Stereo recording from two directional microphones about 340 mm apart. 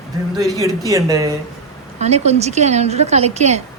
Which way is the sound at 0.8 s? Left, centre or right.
Centre.